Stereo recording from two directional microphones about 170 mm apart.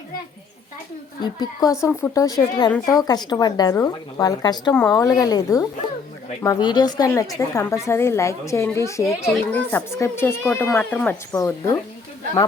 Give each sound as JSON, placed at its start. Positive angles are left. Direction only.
{"t": 1.2, "sound": "a woman's voice", "side_deg": 25}